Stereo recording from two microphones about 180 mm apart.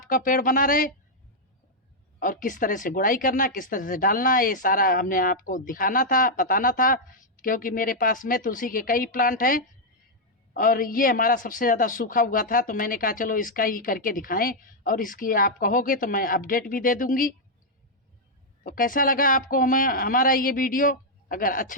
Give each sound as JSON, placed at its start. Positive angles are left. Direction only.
{"t": 0.1, "sound": "speech", "side_deg": 50}
{"t": 2.1, "sound": "speech", "side_deg": 50}
{"t": 18.6, "sound": "speech", "side_deg": 50}